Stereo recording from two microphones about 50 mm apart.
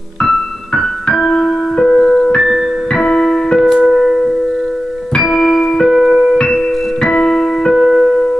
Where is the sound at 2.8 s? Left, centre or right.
Centre.